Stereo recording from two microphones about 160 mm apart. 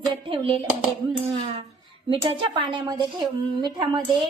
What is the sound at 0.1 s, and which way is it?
Speech, 35° right (ahead or behind).